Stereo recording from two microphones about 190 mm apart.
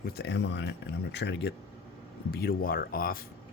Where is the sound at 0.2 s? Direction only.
65° left (ahead or behind); by 3.2 s 50° left (ahead or behind).